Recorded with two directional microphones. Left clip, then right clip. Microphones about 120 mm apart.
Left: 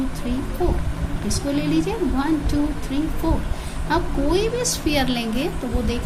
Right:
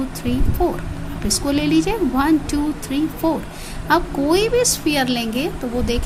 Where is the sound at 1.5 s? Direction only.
50° right (ahead or behind); by 5.5 s 30° right (ahead or behind).